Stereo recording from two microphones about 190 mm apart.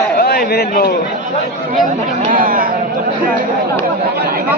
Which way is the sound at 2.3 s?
45° right (ahead or behind).